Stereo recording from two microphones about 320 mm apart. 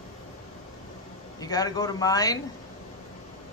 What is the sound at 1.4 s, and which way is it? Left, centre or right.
Speech, centre.